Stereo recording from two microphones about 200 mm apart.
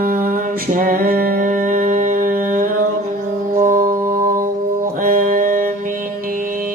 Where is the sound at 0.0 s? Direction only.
45° right (ahead or behind).